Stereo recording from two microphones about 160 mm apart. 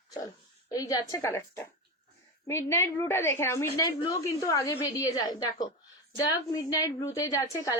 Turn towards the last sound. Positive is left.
turn(degrees=20)  # may be behind; listen again after turning